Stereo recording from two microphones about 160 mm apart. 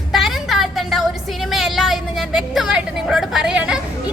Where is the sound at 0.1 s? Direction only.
Centre (ahead or behind).